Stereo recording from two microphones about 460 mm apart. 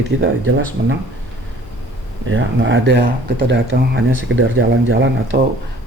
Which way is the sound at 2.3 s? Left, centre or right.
Right.